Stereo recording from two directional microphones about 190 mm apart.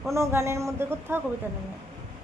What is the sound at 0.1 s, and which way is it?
A woman's voice, 15° right (ahead or behind).